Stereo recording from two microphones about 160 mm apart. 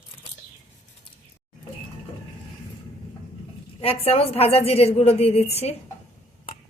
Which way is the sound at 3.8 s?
35° left (ahead or behind).